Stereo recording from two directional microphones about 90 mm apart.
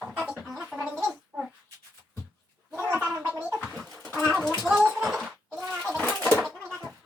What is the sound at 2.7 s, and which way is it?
Gargling, 25° right (ahead or behind).